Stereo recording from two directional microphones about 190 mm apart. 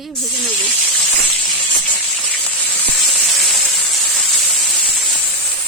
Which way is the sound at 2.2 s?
Centre (ahead or behind).